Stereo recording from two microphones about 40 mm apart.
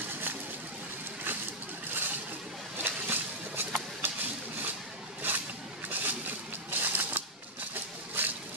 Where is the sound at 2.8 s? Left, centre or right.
Right.